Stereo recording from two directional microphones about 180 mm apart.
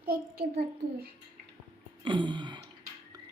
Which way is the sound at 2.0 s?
25° right (ahead or behind).